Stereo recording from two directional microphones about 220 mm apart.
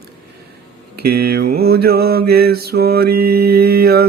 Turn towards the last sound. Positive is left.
turn(degrees=-45)  # may be behind; listen again after turning